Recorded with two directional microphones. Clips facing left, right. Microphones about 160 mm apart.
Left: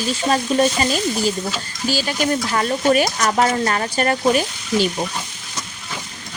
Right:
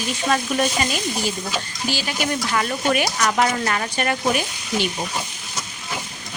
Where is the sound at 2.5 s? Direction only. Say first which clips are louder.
Left 4 dB; 35° left (ahead or behind).